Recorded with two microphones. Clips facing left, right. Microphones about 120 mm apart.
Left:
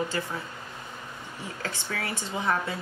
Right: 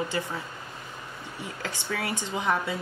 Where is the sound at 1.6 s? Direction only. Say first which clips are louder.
Right 2 dB; 15° right (ahead or behind).